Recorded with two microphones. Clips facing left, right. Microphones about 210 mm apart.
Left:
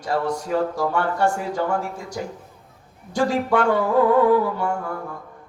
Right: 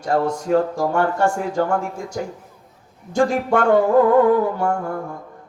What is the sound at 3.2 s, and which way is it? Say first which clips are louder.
Speech: right 2 dB; 45° right (ahead or behind).